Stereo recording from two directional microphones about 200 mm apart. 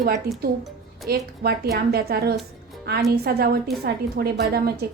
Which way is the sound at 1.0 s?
50° right (ahead or behind).